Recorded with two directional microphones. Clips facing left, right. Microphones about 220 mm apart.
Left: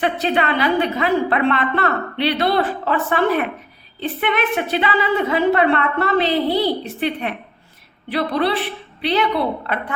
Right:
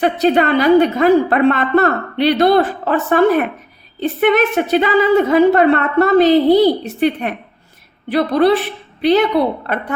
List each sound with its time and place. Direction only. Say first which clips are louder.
0.0 s a woman's voice: right 6 dB; 40° right (ahead or behind)